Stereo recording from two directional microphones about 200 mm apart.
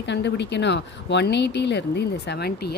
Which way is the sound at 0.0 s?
60° left (ahead or behind).